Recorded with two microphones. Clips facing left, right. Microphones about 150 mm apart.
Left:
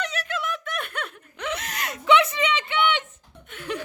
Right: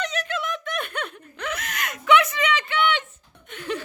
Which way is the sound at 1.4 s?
25° left (ahead or behind).